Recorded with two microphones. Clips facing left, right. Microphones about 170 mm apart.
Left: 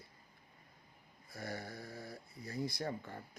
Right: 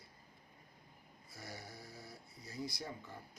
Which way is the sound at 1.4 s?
55° left (ahead or behind).